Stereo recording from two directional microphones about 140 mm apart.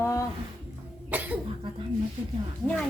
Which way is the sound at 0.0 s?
20° left (ahead or behind).